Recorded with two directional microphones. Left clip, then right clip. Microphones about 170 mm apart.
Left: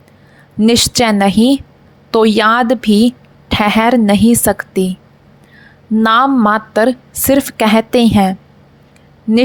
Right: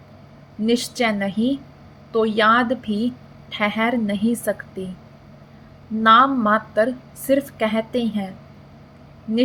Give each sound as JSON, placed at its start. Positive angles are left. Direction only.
{"t": 0.6, "sound": "a woman's voice", "side_deg": 85}
{"t": 6.0, "sound": "a woman's voice", "side_deg": 90}